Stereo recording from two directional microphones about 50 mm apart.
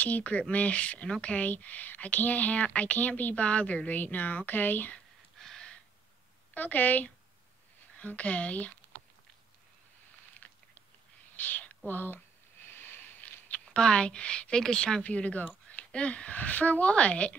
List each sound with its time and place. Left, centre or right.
0.0 s a woman's voice: left
5.4 s gasp: centre
6.5 s a woman's voice: left
10.3 s a sound: left
11.3 s speech: left
12.6 s sniff: left
13.7 s speech: centre
15.0 s speech: left